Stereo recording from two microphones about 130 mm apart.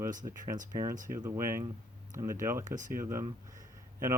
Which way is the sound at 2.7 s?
75° right (ahead or behind).